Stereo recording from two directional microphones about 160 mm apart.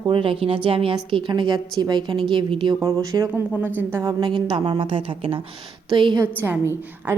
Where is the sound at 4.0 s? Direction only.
25° right (ahead or behind).